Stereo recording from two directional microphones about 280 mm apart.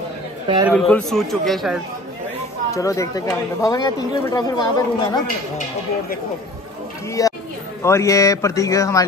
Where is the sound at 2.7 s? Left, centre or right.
Centre.